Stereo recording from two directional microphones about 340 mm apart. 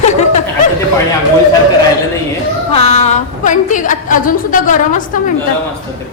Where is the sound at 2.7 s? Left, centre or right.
Centre.